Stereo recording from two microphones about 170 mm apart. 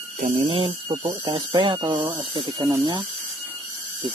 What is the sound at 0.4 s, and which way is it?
Speech, 30° right (ahead or behind).